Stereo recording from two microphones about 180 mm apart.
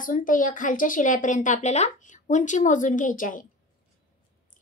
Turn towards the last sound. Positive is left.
turn(degrees=45)  # may be behind; listen again after turning